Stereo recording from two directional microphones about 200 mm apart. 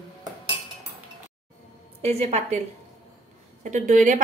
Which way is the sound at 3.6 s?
35° right (ahead or behind).